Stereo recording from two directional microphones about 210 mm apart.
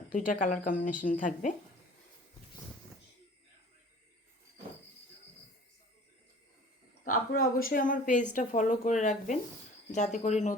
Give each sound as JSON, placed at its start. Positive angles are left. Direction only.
{"t": 0.1, "sound": "a woman's voice", "side_deg": 35}
{"t": 7.0, "sound": "a woman's voice", "side_deg": 40}